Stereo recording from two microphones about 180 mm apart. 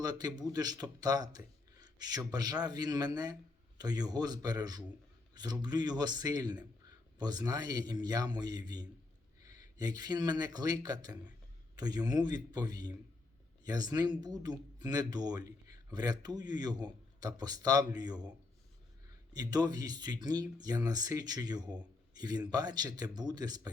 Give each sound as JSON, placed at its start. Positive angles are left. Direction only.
{"t": 0.0, "sound": "speech", "side_deg": -20}
{"t": 19.3, "sound": "speech", "side_deg": -20}